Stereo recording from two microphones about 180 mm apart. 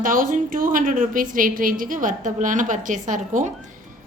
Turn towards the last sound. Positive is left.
turn(degrees=-45)  # may be behind; listen again after turning